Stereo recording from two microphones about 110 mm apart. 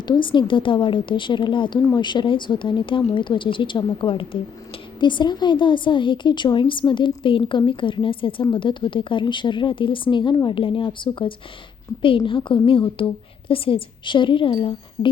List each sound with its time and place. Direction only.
0.1 s a woman's voice: 45° left (ahead or behind)